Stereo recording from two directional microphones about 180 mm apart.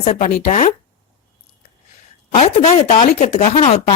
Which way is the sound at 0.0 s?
45° left (ahead or behind).